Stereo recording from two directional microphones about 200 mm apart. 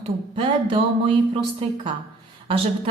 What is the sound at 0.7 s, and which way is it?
Speech, 25° right (ahead or behind).